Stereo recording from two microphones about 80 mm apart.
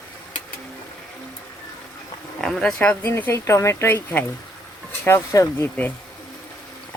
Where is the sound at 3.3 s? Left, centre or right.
Left.